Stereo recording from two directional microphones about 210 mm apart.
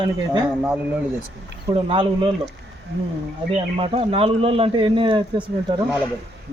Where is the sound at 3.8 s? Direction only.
25° right (ahead or behind).